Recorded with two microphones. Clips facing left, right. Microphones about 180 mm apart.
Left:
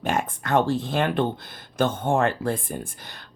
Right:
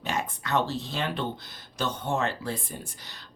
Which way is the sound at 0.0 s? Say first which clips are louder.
Left 6 dB; 50° left (ahead or behind).